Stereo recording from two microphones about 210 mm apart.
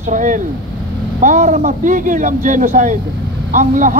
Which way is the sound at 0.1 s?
40° right (ahead or behind).